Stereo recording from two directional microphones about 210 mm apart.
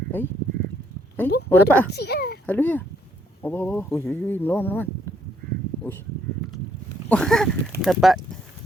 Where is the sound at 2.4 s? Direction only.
10° left (ahead or behind).